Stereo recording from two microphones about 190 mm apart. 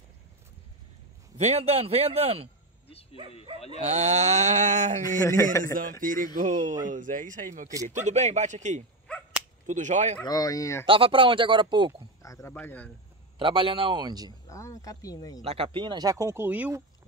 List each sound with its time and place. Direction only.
1.4 s speech: 35° right (ahead or behind)
2.9 s bow-wow: 30° left (ahead or behind)
3.7 s speech: 35° right (ahead or behind)
5.2 s speech: 15° left (ahead or behind)
5.8 s speech: 45° right (ahead or behind)
9.0 s whip: 5° left (ahead or behind)
9.7 s speech: 40° right (ahead or behind)
10.2 s speech: 20° left (ahead or behind)
10.9 s speech: 25° right (ahead or behind)
12.2 s speech: 15° left (ahead or behind)
13.4 s speech: 25° right (ahead or behind)
14.5 s speech: 15° left (ahead or behind)
15.4 s speech: 30° right (ahead or behind); by 16.8 s 10° right (ahead or behind)